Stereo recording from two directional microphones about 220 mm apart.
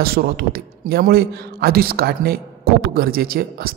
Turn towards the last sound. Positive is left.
turn(degrees=-40)  # may be behind; listen again after turning